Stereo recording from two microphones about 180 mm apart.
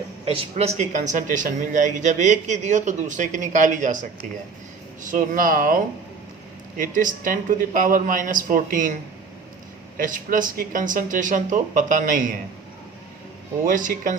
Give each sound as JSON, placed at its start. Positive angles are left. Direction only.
{"t": 0.3, "sound": "speech", "side_deg": -35}
{"t": 5.0, "sound": "speech", "side_deg": -45}
{"t": 10.0, "sound": "speech", "side_deg": -50}
{"t": 13.7, "sound": "speech", "side_deg": -50}